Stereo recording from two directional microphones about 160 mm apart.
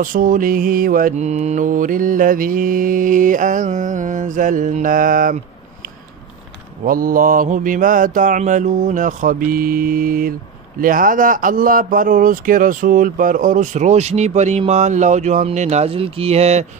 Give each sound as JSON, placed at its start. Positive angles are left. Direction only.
{"t": 0.0, "sound": "mantra", "side_deg": -60}
{"t": 1.1, "sound": "mantra", "side_deg": -45}
{"t": 6.8, "sound": "mantra", "side_deg": -60}
{"t": 14.7, "sound": "speech", "side_deg": -45}